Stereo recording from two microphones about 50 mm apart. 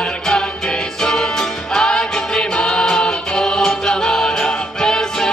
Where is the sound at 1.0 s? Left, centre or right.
Centre.